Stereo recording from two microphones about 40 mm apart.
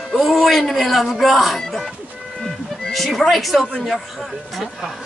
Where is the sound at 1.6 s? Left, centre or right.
Centre.